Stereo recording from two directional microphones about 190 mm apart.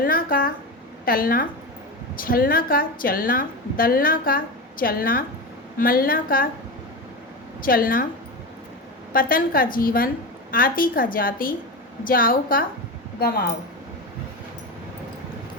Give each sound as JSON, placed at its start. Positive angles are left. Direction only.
{"t": 0.0, "sound": "a sound", "side_deg": 50}
{"t": 1.0, "sound": "a woman's voice", "side_deg": 50}
{"t": 7.6, "sound": "a woman's voice", "side_deg": 50}
{"t": 9.1, "sound": "a woman's voice", "side_deg": 50}